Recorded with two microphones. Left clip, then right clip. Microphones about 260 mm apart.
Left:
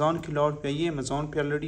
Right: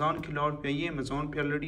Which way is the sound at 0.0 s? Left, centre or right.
Centre.